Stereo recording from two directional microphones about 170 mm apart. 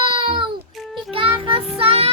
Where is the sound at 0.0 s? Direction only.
30° right (ahead or behind).